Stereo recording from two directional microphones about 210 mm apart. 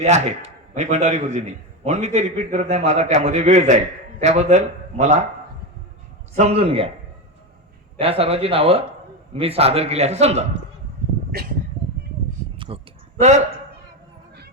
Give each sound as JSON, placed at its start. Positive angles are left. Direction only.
{"t": 0.0, "sound": "a man's voice", "side_deg": -35}
{"t": 6.3, "sound": "a man's voice", "side_deg": -30}
{"t": 7.9, "sound": "a man's voice", "side_deg": -30}
{"t": 11.3, "sound": "speech", "side_deg": -45}
{"t": 12.5, "sound": "a sound", "side_deg": -25}